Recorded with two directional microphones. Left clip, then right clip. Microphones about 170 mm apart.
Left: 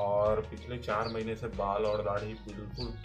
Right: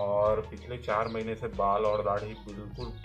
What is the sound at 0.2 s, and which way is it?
Music, centre (ahead or behind).